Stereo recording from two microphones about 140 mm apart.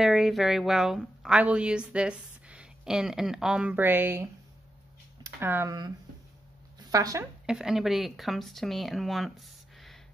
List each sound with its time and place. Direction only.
0.0 s a woman's voice: 5° right (ahead or behind)
6.8 s speech: 25° right (ahead or behind)
7.4 s a woman's voice: 5° right (ahead or behind)